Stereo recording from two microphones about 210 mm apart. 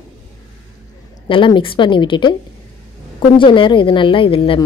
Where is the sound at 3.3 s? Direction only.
25° left (ahead or behind).